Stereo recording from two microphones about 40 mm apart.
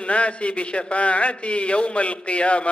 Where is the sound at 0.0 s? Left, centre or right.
Left.